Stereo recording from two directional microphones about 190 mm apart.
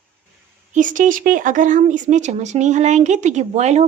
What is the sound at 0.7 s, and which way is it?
Speech, 45° right (ahead or behind).